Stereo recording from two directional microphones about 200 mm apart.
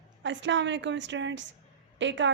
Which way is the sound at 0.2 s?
65° right (ahead or behind).